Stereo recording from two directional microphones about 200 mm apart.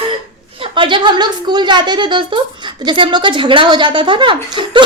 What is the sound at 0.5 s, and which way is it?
A woman's voice, 25° right (ahead or behind).